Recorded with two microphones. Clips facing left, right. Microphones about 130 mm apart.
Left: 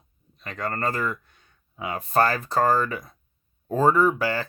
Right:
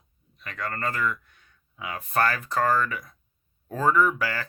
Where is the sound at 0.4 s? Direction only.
30° left (ahead or behind).